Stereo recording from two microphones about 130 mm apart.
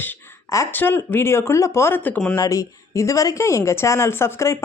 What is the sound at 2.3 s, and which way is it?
A woman's voice, 25° left (ahead or behind).